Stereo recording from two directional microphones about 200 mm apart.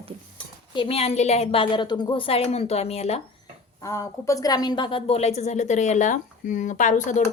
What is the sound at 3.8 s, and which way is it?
A woman's voice, 15° left (ahead or behind).